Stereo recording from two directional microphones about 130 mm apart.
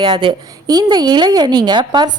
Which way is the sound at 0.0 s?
40° right (ahead or behind).